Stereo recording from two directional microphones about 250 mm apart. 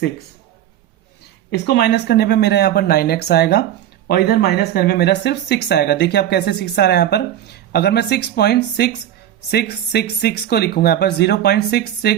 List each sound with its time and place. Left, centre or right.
1.5 s speech: left